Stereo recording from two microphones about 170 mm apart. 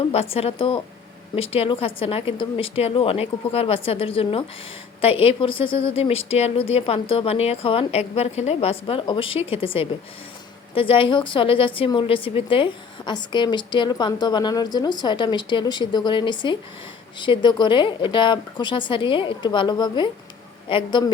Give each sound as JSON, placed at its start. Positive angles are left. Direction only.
{"t": 0.1, "sound": "a woman's voice", "side_deg": 35}